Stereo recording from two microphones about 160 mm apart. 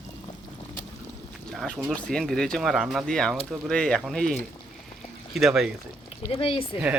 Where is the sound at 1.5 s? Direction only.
Centre (ahead or behind).